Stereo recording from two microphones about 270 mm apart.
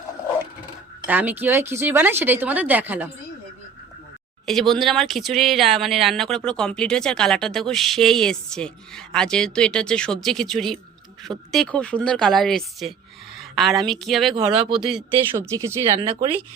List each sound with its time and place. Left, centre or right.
1.0 s speech: centre
4.4 s speech: centre
14.3 s speech: centre